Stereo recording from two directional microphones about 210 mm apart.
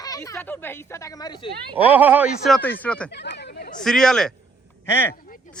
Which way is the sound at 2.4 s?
5° left (ahead or behind).